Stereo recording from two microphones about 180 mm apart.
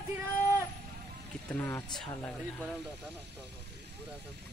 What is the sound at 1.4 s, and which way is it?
Speech, 10° left (ahead or behind).